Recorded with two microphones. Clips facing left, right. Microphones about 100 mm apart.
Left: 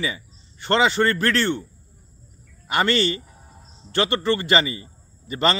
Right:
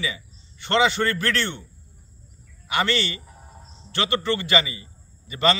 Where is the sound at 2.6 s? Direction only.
40° left (ahead or behind).